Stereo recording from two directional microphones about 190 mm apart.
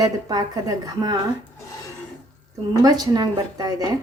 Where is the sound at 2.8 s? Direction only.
20° right (ahead or behind).